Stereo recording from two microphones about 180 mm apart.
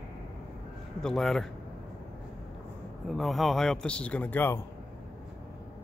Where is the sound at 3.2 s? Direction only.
Centre (ahead or behind).